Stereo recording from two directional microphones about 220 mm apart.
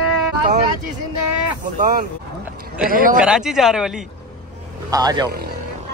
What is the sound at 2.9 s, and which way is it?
Speech, 40° right (ahead or behind).